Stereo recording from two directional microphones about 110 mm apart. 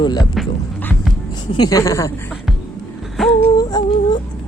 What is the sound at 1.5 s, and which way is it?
Speech, 35° left (ahead or behind).